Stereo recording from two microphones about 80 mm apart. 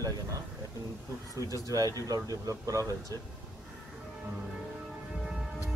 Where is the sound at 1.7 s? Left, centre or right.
Right.